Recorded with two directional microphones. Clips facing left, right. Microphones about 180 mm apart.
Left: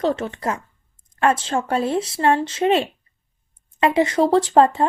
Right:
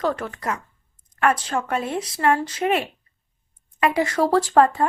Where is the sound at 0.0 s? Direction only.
25° left (ahead or behind).